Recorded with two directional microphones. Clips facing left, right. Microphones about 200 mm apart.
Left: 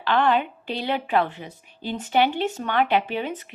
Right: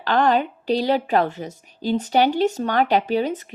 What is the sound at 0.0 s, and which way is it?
Speech, 40° right (ahead or behind).